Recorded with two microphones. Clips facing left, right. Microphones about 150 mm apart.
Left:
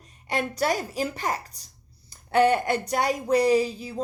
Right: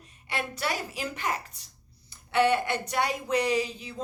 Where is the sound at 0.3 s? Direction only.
40° left (ahead or behind).